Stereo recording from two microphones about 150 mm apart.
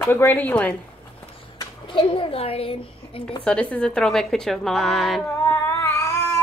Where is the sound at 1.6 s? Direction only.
35° left (ahead or behind).